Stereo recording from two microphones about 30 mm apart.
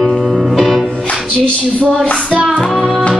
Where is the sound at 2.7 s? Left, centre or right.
Centre.